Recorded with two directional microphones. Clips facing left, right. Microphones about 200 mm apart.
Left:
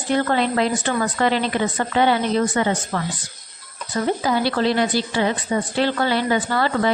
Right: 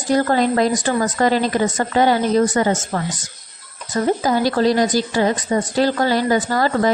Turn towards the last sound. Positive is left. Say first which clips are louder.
# right 3 dB
turn(degrees=-40)  # may be behind; listen again after turning